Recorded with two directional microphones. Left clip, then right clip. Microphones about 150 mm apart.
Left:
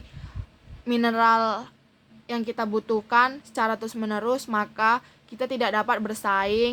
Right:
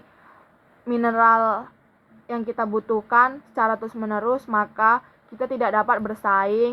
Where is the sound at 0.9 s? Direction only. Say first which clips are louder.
Right 3 dB; 50° left (ahead or behind).